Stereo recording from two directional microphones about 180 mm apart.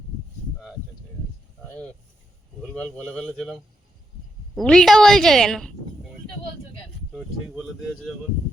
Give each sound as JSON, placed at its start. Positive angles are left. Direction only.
{"t": 1.7, "sound": "vehicle", "side_deg": 5}
{"t": 2.6, "sound": "a sound", "side_deg": 5}
{"t": 3.1, "sound": "a woman's voice", "side_deg": 0}